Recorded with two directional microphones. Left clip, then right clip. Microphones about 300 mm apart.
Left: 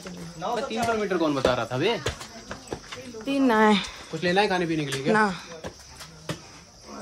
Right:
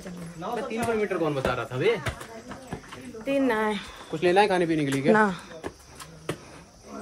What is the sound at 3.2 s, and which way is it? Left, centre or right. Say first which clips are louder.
Speech: even; centre.